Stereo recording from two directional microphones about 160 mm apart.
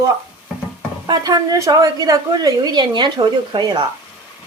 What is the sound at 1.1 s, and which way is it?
A woman's voice, 25° right (ahead or behind).